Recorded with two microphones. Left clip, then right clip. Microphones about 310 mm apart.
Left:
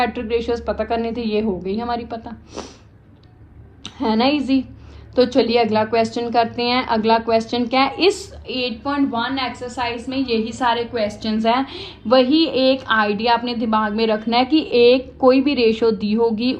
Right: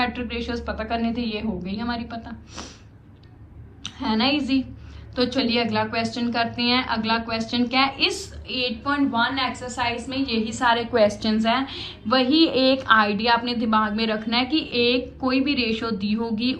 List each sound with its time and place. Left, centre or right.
0.0 s a woman's voice: left
3.8 s a woman's voice: centre
11.4 s a woman's voice: centre